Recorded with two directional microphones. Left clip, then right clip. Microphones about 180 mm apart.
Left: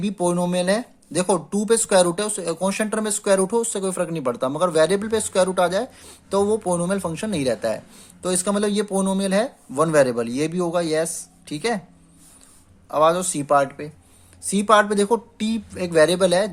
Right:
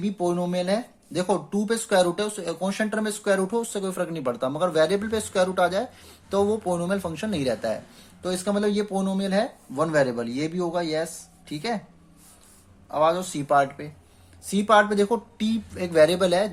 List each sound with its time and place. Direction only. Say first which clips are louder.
0.0 s speech: left 3 dB; 40° left (ahead or behind)
8.2 s speech: left 3 dB; 40° left (ahead or behind)
12.9 s speech: left 4 dB; 40° left (ahead or behind)